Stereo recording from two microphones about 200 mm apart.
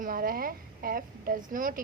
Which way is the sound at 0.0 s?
45° right (ahead or behind).